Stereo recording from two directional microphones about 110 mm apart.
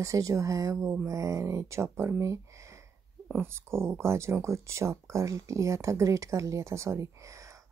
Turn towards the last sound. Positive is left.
turn(degrees=-30)  # may be behind; listen again after turning